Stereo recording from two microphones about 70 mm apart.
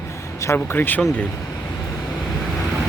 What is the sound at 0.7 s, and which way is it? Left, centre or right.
Speech, left.